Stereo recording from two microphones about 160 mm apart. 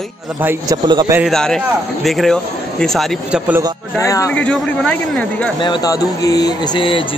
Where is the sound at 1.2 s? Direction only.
5° left (ahead or behind).